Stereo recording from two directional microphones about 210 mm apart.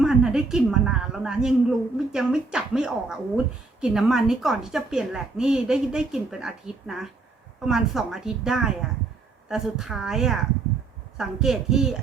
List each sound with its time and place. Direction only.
0.0 s a woman's voice: centre (ahead or behind)